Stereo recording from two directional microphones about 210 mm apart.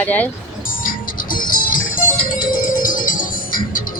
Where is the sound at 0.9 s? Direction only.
40° left (ahead or behind).